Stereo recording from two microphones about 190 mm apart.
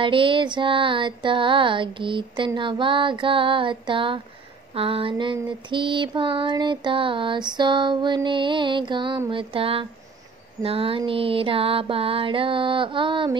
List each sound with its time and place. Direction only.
0.0 s female singing: 25° right (ahead or behind)